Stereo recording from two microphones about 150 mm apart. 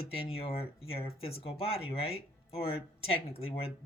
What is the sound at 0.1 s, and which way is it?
Speech, 40° left (ahead or behind).